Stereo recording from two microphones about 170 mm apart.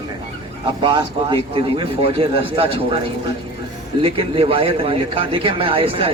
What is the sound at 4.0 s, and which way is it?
A man's voice, 35° right (ahead or behind).